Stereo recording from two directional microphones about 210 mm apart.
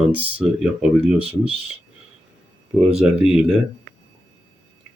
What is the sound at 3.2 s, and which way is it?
Speech, centre (ahead or behind).